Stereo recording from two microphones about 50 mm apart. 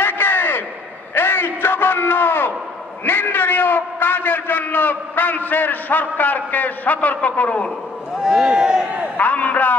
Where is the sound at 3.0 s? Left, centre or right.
Left.